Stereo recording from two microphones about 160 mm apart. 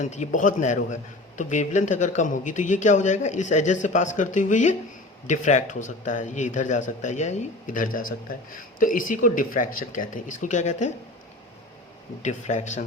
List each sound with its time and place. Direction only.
0.0 s speech: 50° left (ahead or behind)
12.2 s speech: 45° left (ahead or behind)